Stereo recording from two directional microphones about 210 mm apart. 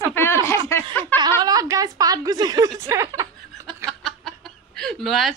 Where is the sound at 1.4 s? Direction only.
15° right (ahead or behind).